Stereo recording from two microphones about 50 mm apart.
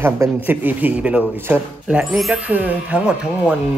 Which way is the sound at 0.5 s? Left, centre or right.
Right.